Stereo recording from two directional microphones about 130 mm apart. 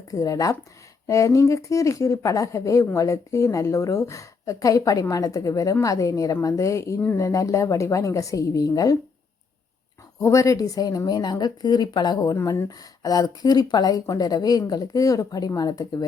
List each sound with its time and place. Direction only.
0.1 s speech: 25° left (ahead or behind)
10.2 s speech: 25° left (ahead or behind)